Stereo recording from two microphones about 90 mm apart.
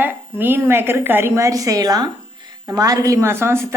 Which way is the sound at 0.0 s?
25° right (ahead or behind).